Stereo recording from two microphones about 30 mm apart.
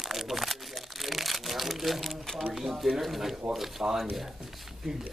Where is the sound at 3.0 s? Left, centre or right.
Centre.